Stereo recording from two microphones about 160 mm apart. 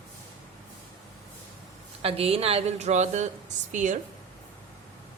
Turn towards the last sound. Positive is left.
turn(degrees=-50)  # may be behind; listen again after turning